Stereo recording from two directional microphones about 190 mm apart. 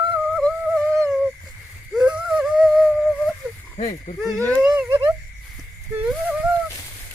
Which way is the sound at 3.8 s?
40° left (ahead or behind).